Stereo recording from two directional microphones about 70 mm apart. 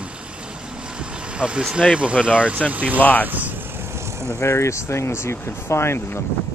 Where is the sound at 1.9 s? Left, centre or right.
Centre.